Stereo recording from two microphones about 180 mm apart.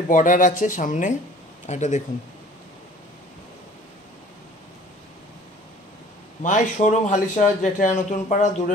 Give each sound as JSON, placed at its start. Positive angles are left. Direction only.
{"t": 0.1, "sound": "speech", "side_deg": 45}
{"t": 6.4, "sound": "speech", "side_deg": 40}